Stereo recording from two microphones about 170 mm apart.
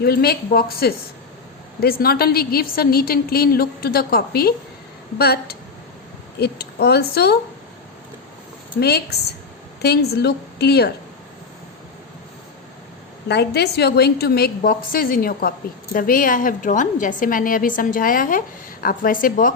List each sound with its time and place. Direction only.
0.0 s a woman's voice: 65° left (ahead or behind)
8.8 s a woman's voice: 70° left (ahead or behind)
13.2 s a woman's voice: 75° left (ahead or behind); by 19.5 s 55° left (ahead or behind)